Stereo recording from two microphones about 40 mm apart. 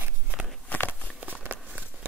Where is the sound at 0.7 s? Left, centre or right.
Left.